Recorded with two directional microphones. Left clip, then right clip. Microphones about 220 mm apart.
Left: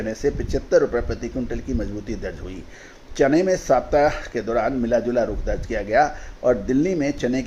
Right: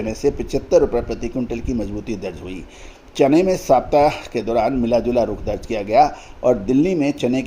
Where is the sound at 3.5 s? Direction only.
40° right (ahead or behind).